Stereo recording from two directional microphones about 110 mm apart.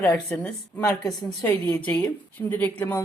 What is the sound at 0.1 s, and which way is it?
Speech, 25° left (ahead or behind).